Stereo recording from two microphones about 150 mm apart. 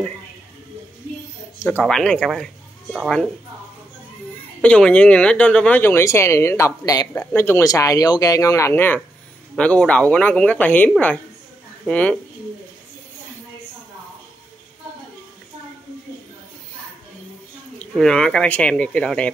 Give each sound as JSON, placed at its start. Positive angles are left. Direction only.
{"t": 1.8, "sound": "speech", "side_deg": 5}
{"t": 4.6, "sound": "speech", "side_deg": 5}
{"t": 17.7, "sound": "speech", "side_deg": 5}